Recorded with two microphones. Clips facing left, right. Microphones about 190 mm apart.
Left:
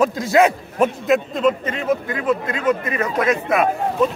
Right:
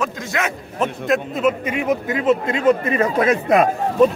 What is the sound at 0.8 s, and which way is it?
Speech, centre (ahead or behind).